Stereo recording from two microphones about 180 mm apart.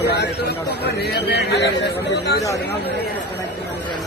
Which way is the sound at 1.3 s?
70° left (ahead or behind).